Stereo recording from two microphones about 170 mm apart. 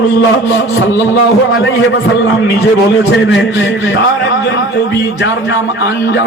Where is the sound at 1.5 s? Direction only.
90° left.